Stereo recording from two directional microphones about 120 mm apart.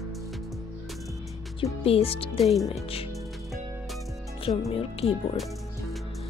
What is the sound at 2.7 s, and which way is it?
Speech, 50° left (ahead or behind).